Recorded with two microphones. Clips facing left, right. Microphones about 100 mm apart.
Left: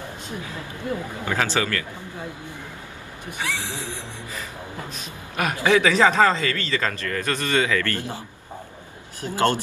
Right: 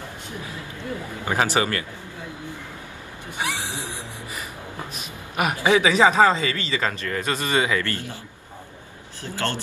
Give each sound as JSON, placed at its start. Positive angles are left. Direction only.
{"t": 1.2, "sound": "speech", "side_deg": -20}
{"t": 3.4, "sound": "speech", "side_deg": -15}
{"t": 9.2, "sound": "speech", "side_deg": 15}